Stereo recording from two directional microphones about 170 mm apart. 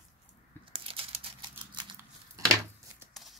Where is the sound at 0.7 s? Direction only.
35° right (ahead or behind).